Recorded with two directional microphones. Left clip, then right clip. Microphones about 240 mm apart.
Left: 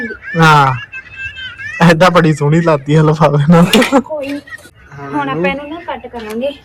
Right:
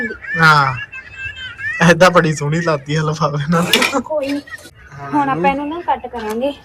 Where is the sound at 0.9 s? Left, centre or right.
Right.